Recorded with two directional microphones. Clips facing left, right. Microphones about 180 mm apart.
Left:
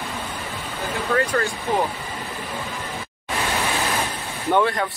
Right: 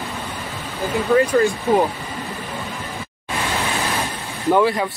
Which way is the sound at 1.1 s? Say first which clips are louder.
Right 7 dB; 15° right (ahead or behind).